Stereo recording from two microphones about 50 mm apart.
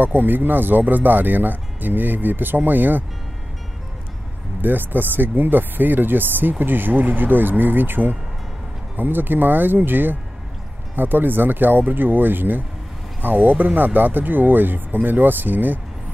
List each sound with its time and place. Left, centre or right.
0.0 s speech: right
4.6 s speech: right